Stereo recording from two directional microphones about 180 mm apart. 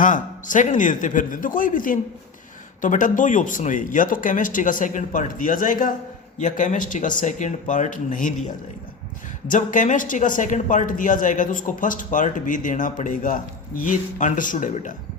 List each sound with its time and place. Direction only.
0.0 s speech: 45° left (ahead or behind)
9.5 s speech: 45° left (ahead or behind)